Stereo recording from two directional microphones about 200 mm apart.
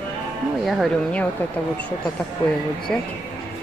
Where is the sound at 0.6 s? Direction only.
Centre (ahead or behind).